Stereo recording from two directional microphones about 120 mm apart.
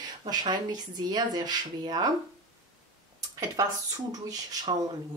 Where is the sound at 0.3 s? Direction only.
35° right (ahead or behind).